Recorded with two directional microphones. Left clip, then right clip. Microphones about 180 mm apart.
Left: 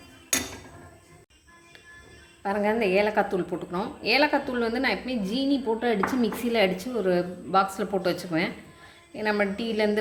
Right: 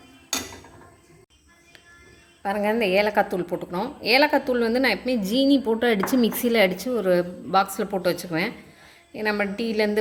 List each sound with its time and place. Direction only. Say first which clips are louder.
2.4 s a woman's voice: right 2 dB; 30° right (ahead or behind)